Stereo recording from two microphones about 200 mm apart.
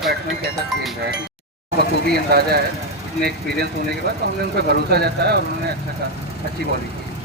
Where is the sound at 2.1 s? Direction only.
50° right (ahead or behind).